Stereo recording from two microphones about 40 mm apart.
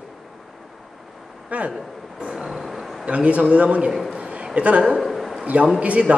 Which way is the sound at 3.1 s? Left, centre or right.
Right.